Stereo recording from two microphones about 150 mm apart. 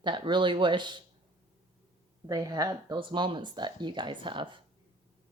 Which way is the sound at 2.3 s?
25° right (ahead or behind).